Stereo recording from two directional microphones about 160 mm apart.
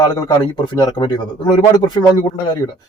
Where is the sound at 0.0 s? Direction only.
25° left (ahead or behind).